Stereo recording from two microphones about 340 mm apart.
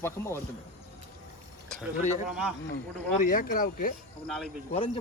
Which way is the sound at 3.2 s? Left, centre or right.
Left.